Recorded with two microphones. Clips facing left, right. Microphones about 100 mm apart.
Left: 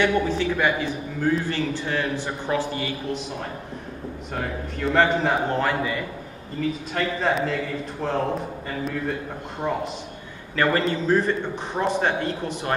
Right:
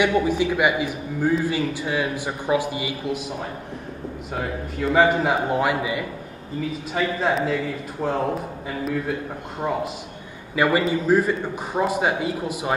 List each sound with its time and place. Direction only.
0.0 s a man's voice: 10° right (ahead or behind)